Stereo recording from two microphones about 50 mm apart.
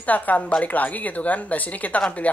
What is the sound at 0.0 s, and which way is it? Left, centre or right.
Speech, left.